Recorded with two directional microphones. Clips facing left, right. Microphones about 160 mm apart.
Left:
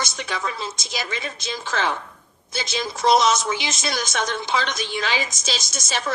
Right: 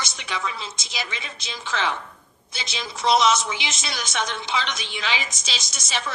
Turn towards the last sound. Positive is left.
turn(degrees=45)  # may be behind; listen again after turning